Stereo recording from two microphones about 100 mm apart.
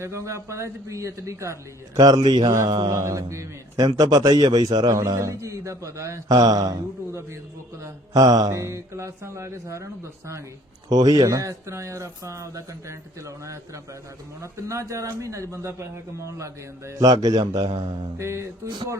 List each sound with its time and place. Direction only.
0.0 s speech: 30° right (ahead or behind)
2.0 s a man's voice: 40° right (ahead or behind)
2.9 s speech: 30° right (ahead or behind)
4.9 s speech: 30° right (ahead or behind)
10.8 s a man's voice: 40° right (ahead or behind)
18.2 s speech: 30° right (ahead or behind)